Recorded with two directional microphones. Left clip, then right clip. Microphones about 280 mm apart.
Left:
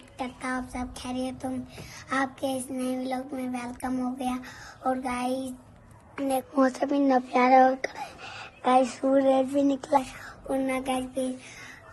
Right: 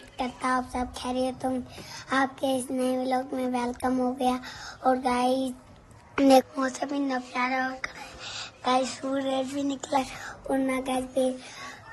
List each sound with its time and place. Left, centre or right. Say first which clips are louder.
0.2 s a woman's voice: right 5 dB; centre
6.1 s a woman's voice: right 9 dB; right
6.6 s speech: left 5 dB; centre
10.5 s a woman's voice: even; centre